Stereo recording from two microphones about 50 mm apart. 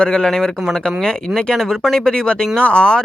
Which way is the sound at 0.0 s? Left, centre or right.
Centre.